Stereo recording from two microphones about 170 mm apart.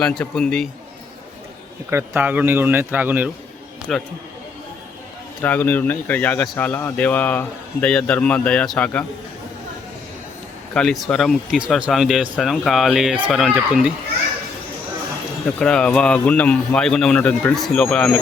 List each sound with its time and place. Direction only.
0.0 s a man's voice: 5° left (ahead or behind)
1.9 s a man's voice: 15° right (ahead or behind)
3.9 s a man's voice: centre (ahead or behind)
5.4 s speech: 10° left (ahead or behind)
10.8 s a man's voice: centre (ahead or behind)
15.5 s a man's voice: 5° left (ahead or behind)